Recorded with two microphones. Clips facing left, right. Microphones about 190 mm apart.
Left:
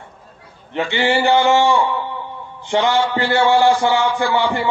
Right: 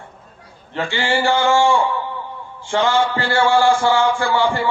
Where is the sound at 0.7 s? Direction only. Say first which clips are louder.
Left 3 dB; 20° left (ahead or behind).